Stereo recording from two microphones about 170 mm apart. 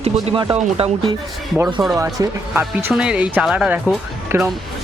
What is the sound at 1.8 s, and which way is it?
Speech, centre (ahead or behind).